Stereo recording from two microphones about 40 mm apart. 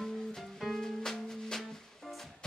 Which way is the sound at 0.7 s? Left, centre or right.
Centre.